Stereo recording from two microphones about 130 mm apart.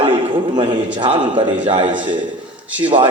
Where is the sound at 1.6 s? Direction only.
55° right (ahead or behind).